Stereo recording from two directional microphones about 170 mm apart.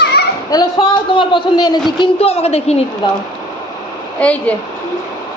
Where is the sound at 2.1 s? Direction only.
35° left (ahead or behind).